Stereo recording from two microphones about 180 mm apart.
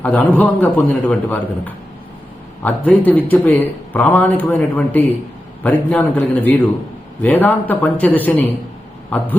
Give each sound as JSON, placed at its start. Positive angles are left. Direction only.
{"t": 0.0, "sound": "a man's voice", "side_deg": 10}